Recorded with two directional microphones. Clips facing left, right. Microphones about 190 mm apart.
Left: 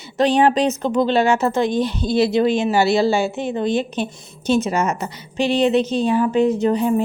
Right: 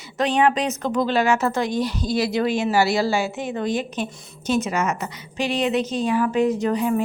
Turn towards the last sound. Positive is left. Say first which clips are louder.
# left 4 dB
turn(degrees=30)  # may be behind; listen again after turning